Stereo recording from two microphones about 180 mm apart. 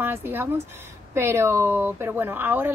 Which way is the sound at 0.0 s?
10° right (ahead or behind).